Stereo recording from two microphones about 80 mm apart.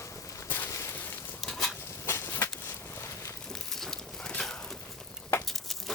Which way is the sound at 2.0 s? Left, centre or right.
Left.